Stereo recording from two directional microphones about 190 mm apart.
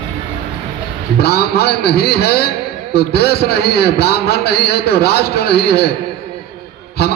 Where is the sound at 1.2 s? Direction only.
55° left (ahead or behind).